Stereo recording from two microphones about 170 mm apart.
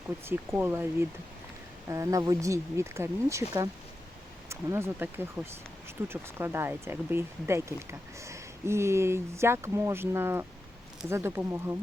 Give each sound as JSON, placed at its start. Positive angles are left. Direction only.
{"t": 0.3, "sound": "speech", "side_deg": -15}
{"t": 4.4, "sound": "speech", "side_deg": -15}